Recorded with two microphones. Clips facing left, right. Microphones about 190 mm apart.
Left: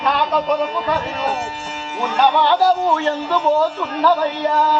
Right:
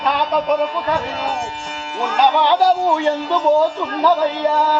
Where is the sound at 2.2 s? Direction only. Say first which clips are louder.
Even; 15° right (ahead or behind).